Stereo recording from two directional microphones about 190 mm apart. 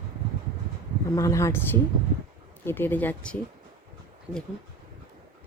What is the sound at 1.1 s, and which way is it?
Speech, 15° left (ahead or behind).